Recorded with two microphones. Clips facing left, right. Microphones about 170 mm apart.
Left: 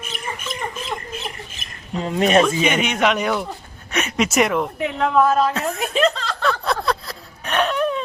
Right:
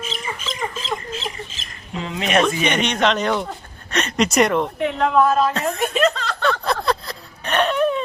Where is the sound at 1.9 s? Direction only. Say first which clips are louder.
Left 6 dB; 45° left (ahead or behind).